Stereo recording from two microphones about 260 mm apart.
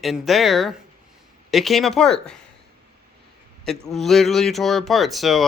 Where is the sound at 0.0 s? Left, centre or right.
Centre.